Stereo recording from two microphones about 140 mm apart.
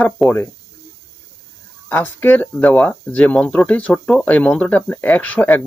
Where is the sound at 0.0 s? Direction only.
10° left (ahead or behind).